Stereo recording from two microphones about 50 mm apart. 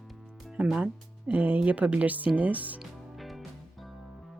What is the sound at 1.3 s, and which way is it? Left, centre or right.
Speech, right.